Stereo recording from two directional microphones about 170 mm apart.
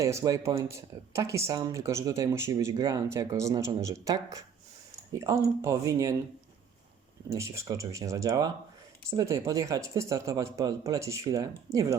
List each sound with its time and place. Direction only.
0.0 s speech: 20° right (ahead or behind)
7.3 s speech: 15° right (ahead or behind)